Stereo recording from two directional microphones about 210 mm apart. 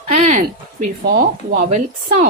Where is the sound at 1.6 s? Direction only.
30° right (ahead or behind).